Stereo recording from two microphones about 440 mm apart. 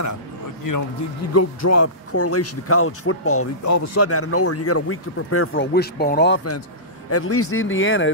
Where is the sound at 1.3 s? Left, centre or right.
Left.